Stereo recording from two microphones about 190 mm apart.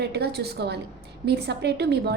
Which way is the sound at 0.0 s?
60° right (ahead or behind).